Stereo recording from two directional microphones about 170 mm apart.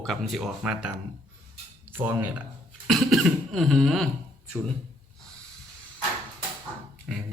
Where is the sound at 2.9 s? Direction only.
Centre (ahead or behind).